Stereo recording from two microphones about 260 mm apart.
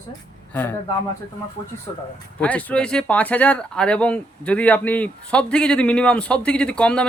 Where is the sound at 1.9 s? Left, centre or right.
Centre.